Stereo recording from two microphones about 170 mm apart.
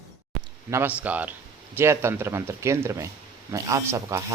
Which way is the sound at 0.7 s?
10° right (ahead or behind).